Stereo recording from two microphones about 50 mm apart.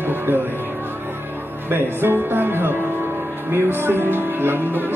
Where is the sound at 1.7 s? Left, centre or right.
Right.